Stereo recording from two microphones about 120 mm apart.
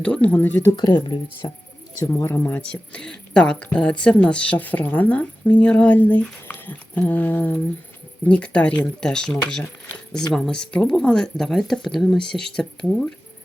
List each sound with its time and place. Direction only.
0.0 s a woman's voice: 10° left (ahead or behind)
0.8 s speech: 35° left (ahead or behind)
2.0 s a woman's voice: 20° left (ahead or behind)